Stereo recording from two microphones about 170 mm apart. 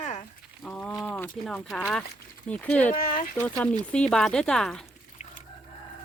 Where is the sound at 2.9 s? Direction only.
50° left (ahead or behind).